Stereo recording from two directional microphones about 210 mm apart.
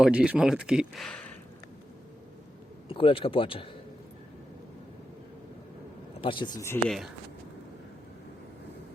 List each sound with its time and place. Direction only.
0.0 s speech: 5° right (ahead or behind)
2.9 s speech: 25° left (ahead or behind)
6.2 s speech: 20° left (ahead or behind)
6.8 s speech: centre (ahead or behind)